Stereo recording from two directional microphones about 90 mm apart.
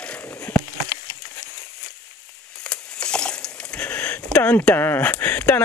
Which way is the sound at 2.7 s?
10° left (ahead or behind).